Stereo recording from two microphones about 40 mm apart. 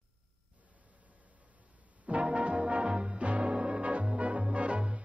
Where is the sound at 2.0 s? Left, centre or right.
Right.